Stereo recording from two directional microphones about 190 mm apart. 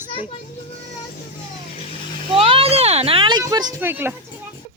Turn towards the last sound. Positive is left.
turn(degrees=-10)  # may be behind; listen again after turning